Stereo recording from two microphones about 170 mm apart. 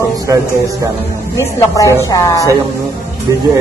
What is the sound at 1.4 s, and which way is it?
Speech, 15° left (ahead or behind).